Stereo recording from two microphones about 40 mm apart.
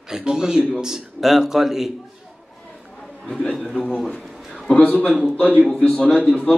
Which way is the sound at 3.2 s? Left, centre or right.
Left.